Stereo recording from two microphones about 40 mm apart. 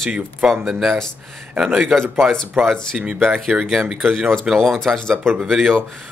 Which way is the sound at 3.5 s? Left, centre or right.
Centre.